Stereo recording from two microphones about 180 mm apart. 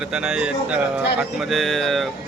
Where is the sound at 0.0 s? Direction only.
5° right (ahead or behind).